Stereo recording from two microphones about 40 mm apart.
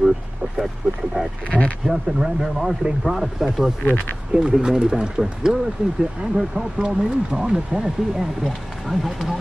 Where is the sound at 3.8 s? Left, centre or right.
Left.